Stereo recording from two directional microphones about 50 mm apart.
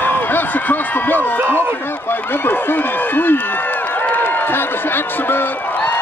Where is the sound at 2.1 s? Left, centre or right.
Left.